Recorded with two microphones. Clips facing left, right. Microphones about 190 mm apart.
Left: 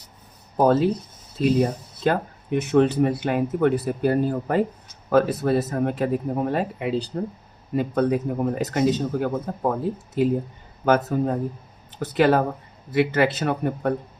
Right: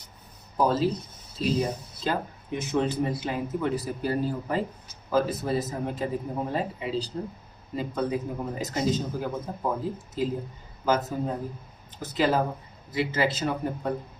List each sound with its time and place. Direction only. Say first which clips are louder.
0.5 s speech: left 6 dB; 55° left (ahead or behind)
2.0 s speech: left 6 dB; 60° left (ahead or behind)